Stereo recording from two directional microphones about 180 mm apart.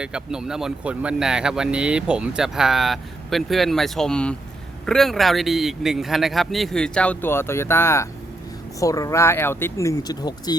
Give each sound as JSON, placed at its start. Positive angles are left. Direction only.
{"t": 0.0, "sound": "speech", "side_deg": -5}